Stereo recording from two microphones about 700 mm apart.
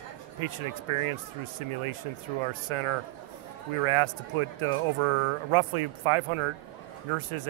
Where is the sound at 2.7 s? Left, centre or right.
Right.